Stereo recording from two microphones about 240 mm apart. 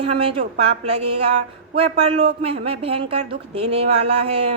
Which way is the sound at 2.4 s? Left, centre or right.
Right.